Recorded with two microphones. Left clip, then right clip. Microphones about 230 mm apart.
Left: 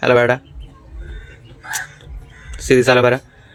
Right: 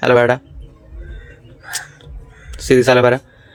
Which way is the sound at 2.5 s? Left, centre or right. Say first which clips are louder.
Right 1 dB; centre.